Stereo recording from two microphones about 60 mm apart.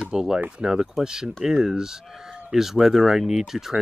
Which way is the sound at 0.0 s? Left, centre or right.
Centre.